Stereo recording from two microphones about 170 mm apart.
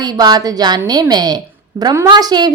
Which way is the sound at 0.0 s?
25° right (ahead or behind).